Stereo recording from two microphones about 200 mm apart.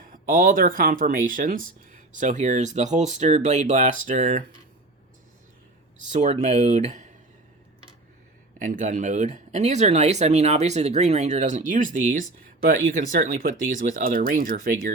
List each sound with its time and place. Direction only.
0.0 s speech: 45° right (ahead or behind)
6.1 s speech: 35° right (ahead or behind)
8.5 s speech: 40° right (ahead or behind)